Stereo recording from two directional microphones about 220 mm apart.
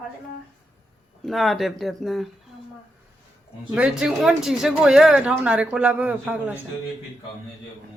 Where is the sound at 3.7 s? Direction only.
5° right (ahead or behind).